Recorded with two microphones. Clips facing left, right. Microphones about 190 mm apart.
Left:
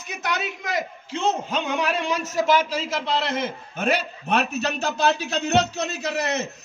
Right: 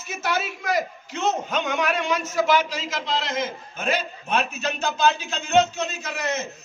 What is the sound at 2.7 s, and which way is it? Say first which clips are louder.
A man's voice: left 3 dB; 60° left (ahead or behind).